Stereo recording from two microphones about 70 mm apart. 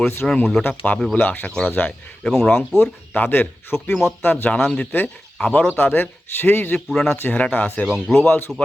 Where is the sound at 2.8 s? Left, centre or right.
Left.